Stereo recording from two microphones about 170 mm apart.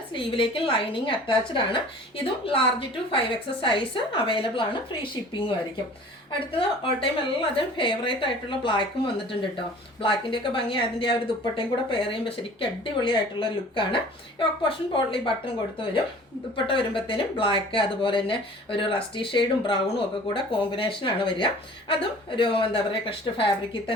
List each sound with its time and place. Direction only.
0.1 s speech: 30° left (ahead or behind)
6.6 s speech: 30° left (ahead or behind)
16.6 s speech: 30° left (ahead or behind)